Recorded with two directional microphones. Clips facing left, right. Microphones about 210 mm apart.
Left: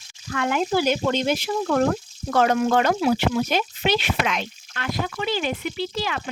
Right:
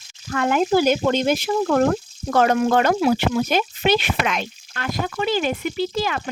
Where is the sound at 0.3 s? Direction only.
45° right (ahead or behind).